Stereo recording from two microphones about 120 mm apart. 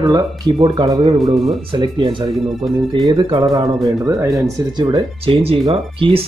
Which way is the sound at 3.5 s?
30° right (ahead or behind).